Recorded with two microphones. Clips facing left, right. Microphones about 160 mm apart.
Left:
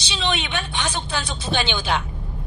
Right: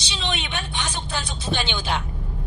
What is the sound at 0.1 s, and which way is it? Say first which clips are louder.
A woman's voice: left 4 dB; 90° left.